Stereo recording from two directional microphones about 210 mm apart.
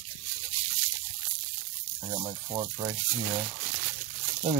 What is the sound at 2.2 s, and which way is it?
Speech, 20° right (ahead or behind).